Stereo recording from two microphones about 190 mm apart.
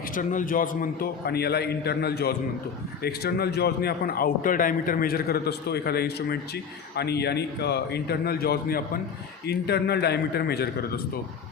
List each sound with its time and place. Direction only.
0.1 s a man's voice: 45° left (ahead or behind)